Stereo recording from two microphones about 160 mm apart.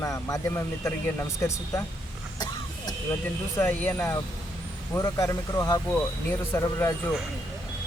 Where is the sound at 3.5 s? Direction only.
15° left (ahead or behind).